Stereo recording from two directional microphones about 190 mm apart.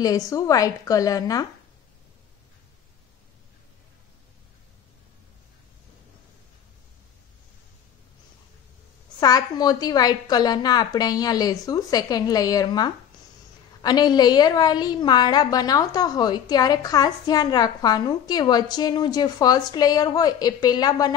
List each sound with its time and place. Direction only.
0.0 s a woman's voice: 20° left (ahead or behind)
9.2 s a woman's voice: 20° left (ahead or behind)